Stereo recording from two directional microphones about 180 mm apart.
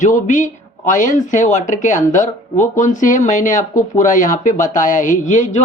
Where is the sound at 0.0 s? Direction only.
45° left (ahead or behind).